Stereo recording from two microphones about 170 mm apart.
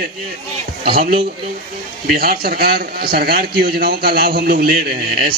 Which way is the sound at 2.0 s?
65° right (ahead or behind).